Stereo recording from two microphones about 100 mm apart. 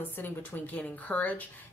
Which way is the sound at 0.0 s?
20° left (ahead or behind).